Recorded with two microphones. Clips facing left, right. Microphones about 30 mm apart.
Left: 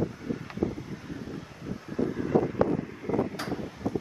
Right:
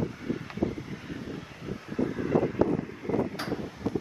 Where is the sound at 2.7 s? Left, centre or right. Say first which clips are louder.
Even; centre.